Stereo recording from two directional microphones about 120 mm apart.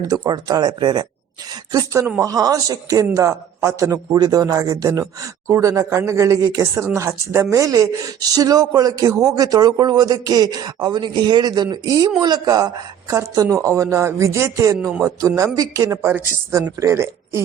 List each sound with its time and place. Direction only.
0.1 s a man's voice: 35° right (ahead or behind)
16.0 s a woman's voice: 15° right (ahead or behind)
16.5 s a man's voice: 30° right (ahead or behind)